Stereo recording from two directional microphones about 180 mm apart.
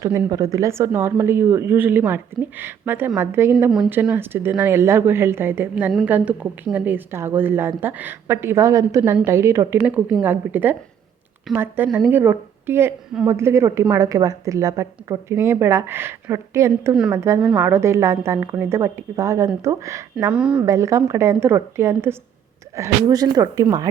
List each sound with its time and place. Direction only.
0.0 s a woman's voice: 15° right (ahead or behind)
3.5 s a woman's voice: 5° right (ahead or behind)
16.9 s speech: 5° right (ahead or behind)
17.2 s a woman's voice: 15° right (ahead or behind)
20.1 s speech: 5° right (ahead or behind)
20.6 s a woman's voice: 15° right (ahead or behind)